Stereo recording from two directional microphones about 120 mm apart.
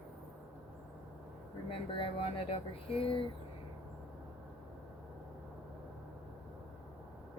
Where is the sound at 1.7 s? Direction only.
50° left (ahead or behind).